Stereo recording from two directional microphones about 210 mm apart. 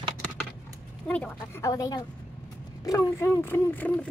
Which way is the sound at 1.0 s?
5° left (ahead or behind).